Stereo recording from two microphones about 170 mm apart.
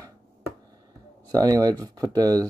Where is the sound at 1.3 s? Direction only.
20° right (ahead or behind).